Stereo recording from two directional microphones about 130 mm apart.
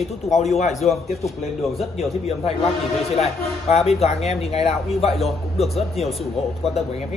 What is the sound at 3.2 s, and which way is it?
Speech, 50° left (ahead or behind).